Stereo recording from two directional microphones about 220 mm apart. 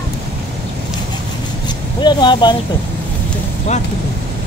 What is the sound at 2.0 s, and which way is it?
Speech, 20° left (ahead or behind).